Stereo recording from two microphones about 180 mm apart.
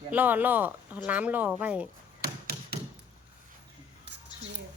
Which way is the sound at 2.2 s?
60° right (ahead or behind).